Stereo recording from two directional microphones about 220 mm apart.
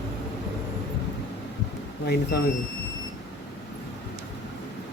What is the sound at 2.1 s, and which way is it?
Speech, 45° left (ahead or behind).